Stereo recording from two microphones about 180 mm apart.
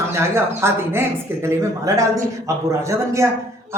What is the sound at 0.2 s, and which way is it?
A man's voice, 15° right (ahead or behind).